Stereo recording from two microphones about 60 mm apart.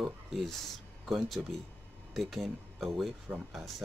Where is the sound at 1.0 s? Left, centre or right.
Centre.